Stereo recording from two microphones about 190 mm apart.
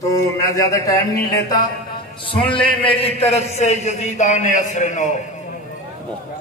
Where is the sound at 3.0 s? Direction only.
30° left (ahead or behind).